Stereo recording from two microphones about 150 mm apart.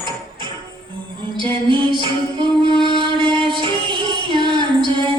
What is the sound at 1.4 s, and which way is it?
Music, 35° right (ahead or behind).